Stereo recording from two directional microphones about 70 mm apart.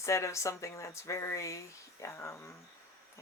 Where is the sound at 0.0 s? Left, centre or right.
Left.